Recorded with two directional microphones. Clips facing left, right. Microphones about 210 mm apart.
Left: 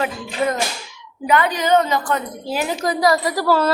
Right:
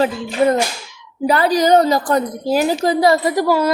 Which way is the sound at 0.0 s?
30° right (ahead or behind).